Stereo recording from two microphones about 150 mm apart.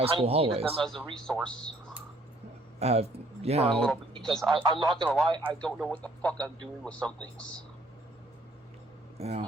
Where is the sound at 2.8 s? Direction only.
45° right (ahead or behind).